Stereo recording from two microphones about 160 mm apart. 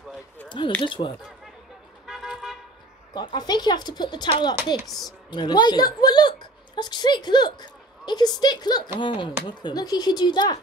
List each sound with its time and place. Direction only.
0.8 s speech: 30° left (ahead or behind)
2.0 s toot: 5° right (ahead or behind)
3.2 s speech: 25° left (ahead or behind)
4.8 s speech: centre (ahead or behind)
5.3 s a woman's voice: 30° left (ahead or behind)